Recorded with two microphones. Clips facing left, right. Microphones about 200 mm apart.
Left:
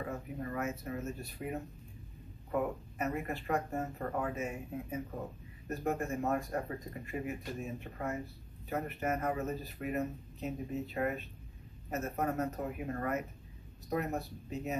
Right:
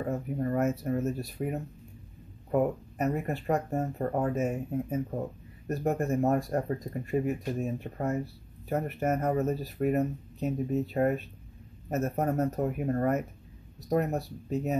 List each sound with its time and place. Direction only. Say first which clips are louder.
0.1 s speech: right 9 dB; 40° right (ahead or behind)
2.5 s speech: right 7 dB; 40° right (ahead or behind)